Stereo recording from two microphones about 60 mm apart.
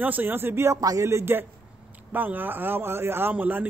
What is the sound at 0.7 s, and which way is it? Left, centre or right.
Speech, right.